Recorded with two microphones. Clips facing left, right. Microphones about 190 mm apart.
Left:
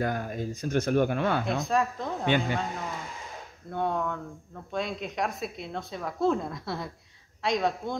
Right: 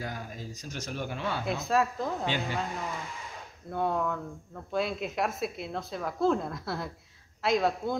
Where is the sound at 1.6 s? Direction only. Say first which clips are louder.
Even; centre (ahead or behind).